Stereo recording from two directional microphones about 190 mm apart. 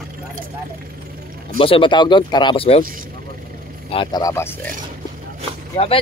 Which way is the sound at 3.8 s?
25° left (ahead or behind).